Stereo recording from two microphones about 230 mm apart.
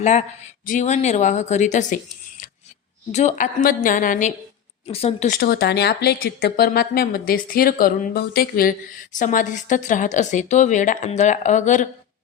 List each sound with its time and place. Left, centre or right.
0.0 s a woman's voice: left
3.1 s a woman's voice: left
5.4 s a woman's voice: left